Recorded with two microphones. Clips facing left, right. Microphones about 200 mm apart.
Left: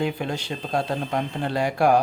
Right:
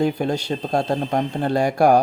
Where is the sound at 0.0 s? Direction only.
40° right (ahead or behind).